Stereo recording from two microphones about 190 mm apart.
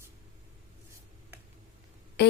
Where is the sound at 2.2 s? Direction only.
60° left (ahead or behind).